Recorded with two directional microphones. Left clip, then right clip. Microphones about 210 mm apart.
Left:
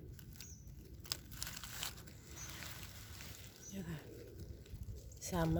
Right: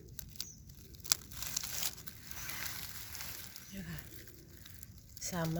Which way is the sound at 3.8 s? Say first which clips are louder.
Right 1 dB; 10° left (ahead or behind).